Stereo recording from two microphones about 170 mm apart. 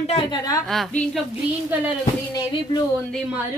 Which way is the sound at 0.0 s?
35° left (ahead or behind).